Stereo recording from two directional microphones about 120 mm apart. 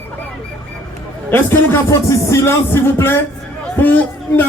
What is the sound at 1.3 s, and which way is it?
Speech, 20° left (ahead or behind).